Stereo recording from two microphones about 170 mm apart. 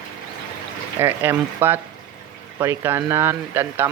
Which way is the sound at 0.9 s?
10° right (ahead or behind).